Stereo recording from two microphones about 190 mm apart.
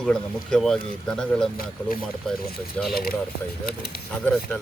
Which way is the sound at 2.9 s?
55° left (ahead or behind).